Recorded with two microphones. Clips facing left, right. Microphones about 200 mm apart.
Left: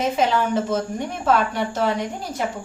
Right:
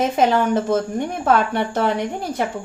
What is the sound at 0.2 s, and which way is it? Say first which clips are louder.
A woman's voice: right 5 dB; 50° right (ahead or behind).